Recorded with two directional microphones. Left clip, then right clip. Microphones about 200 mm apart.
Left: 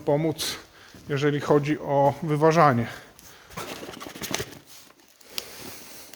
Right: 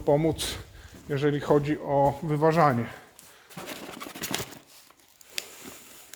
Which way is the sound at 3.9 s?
Centre (ahead or behind).